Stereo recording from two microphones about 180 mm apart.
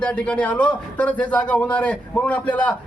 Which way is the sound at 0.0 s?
5° left (ahead or behind).